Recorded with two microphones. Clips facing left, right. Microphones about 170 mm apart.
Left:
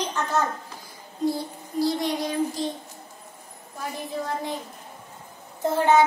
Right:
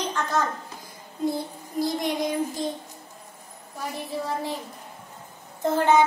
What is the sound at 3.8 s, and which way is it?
Speech, centre (ahead or behind).